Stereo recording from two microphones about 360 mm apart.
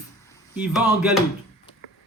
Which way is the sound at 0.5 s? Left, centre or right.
Centre.